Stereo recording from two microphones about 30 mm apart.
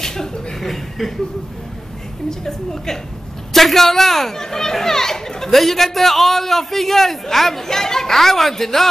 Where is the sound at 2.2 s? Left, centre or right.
Centre.